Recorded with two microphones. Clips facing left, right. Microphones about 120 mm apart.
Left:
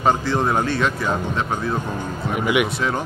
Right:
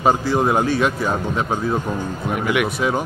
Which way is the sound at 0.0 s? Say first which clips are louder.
Right 2 dB; 10° right (ahead or behind).